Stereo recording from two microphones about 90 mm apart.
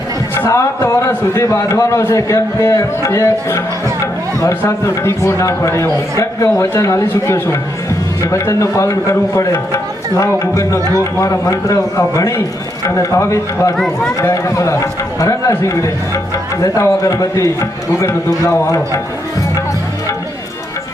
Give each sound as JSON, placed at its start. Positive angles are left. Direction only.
{"t": 0.3, "sound": "a man's voice", "side_deg": 30}
{"t": 10.8, "sound": "a man's voice", "side_deg": -40}
{"t": 11.2, "sound": "a man's voice", "side_deg": 35}
{"t": 13.7, "sound": "speech", "side_deg": 5}
{"t": 14.2, "sound": "a man's voice", "side_deg": 35}